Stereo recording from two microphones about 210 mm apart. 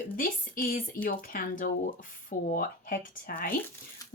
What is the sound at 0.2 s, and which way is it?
A woman's voice, 40° left (ahead or behind).